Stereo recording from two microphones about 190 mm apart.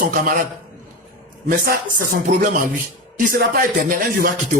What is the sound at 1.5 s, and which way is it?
Speech, 45° right (ahead or behind).